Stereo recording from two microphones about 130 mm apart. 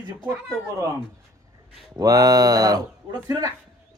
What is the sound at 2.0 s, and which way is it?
A man's voice, 30° right (ahead or behind).